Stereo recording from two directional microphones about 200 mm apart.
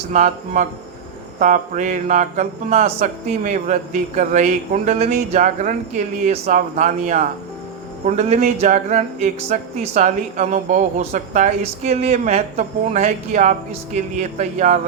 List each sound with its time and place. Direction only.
0.1 s speech: 35° right (ahead or behind)